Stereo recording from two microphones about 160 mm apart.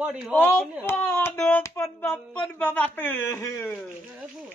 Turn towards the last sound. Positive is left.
turn(degrees=15)  # may be behind; listen again after turning